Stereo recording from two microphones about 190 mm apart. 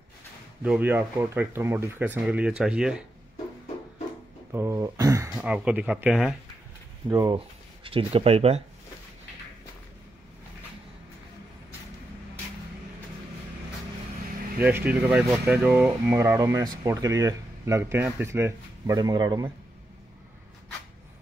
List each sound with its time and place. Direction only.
0.6 s speech: 10° right (ahead or behind)
4.5 s a sound: 15° right (ahead or behind)
5.4 s speech: 5° right (ahead or behind)
7.1 s speech: 20° right (ahead or behind)
7.3 s speech: 30° right (ahead or behind)
14.6 s speech: 10° right (ahead or behind)